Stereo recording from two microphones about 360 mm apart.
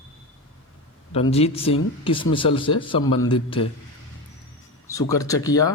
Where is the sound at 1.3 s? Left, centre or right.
Centre.